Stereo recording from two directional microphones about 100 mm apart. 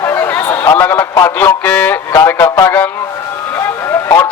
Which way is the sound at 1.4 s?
20° left (ahead or behind).